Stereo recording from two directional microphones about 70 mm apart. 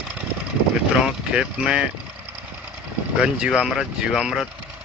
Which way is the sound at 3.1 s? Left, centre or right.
Centre.